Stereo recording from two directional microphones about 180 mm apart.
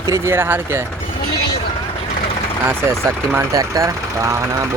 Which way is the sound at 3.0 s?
15° right (ahead or behind).